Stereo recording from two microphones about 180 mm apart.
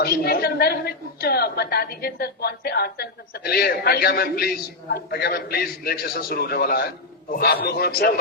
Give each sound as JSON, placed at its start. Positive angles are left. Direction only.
{"t": 0.0, "sound": "a woman's voice", "side_deg": 60}